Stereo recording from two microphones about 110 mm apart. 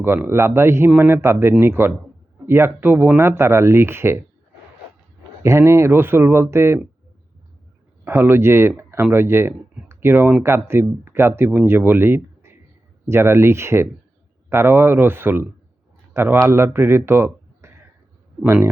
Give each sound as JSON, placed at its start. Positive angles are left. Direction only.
{"t": 0.0, "sound": "speech", "side_deg": -20}
{"t": 5.4, "sound": "speech", "side_deg": -25}
{"t": 8.0, "sound": "speech", "side_deg": -20}